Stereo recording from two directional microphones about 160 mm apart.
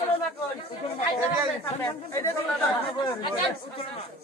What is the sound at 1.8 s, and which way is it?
Speech, 15° left (ahead or behind).